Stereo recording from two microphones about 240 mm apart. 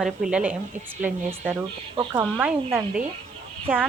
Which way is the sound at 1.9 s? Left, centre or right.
Centre.